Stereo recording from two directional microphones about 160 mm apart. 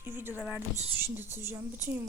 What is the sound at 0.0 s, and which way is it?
Speech, 15° right (ahead or behind).